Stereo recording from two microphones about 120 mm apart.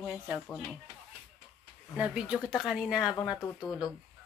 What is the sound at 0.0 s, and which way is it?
Speech, 5° right (ahead or behind).